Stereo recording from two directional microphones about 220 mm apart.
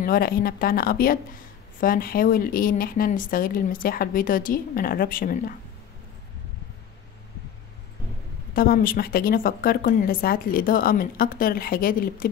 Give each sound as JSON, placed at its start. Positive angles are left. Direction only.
{"t": 0.0, "sound": "a woman's voice", "side_deg": 40}
{"t": 8.5, "sound": "a woman's voice", "side_deg": 40}